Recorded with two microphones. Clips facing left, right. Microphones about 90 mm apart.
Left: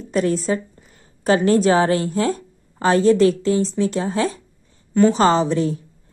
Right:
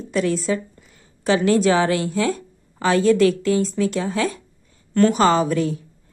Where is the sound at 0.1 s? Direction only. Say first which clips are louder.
Left 1 dB; 40° left (ahead or behind).